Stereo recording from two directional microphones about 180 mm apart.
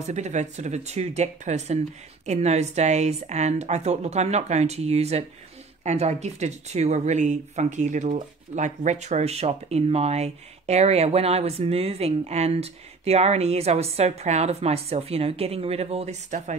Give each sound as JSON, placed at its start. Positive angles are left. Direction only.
{"t": 0.0, "sound": "speech", "side_deg": -40}